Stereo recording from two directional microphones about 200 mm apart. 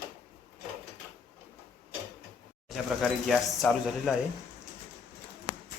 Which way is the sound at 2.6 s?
Centre (ahead or behind).